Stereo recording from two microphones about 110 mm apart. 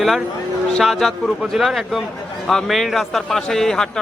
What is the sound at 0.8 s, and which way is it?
A man's voice, centre (ahead or behind).